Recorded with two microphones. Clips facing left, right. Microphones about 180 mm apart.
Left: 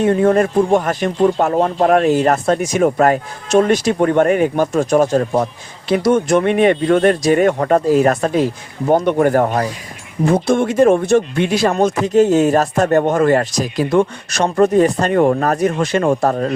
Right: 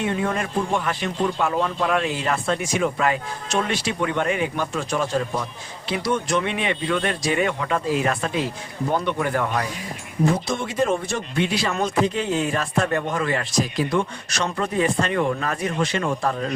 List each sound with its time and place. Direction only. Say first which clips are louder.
0.0 s speech: left 11 dB; 45° left (ahead or behind)
10.3 s speech: left 10 dB; 55° left (ahead or behind)